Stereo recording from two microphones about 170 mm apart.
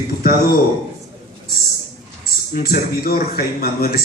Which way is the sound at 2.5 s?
60° left (ahead or behind).